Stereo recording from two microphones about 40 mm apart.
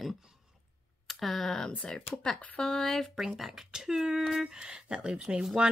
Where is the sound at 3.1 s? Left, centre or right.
Centre.